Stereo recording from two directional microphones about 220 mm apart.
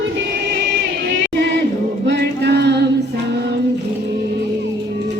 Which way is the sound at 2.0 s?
50° right (ahead or behind).